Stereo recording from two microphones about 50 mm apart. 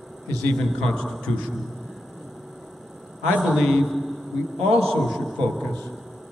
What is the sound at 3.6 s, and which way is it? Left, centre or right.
Speech, centre.